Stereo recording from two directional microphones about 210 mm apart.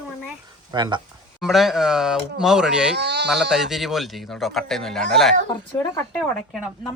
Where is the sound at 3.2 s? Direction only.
Centre (ahead or behind).